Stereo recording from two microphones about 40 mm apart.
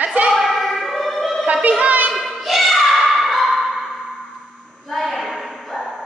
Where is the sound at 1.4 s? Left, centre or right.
Right.